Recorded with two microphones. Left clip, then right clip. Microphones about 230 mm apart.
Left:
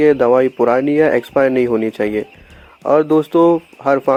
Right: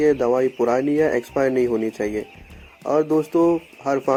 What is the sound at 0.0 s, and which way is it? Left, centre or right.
Speech, left.